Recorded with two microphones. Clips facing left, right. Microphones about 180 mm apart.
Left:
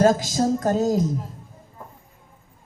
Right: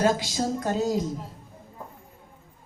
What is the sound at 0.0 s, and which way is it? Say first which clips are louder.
A woman's voice: left 5 dB; 45° left (ahead or behind).